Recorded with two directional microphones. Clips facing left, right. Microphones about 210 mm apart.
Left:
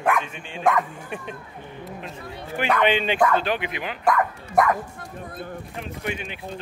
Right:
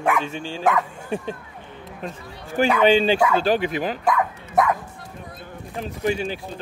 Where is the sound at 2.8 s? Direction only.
35° right (ahead or behind).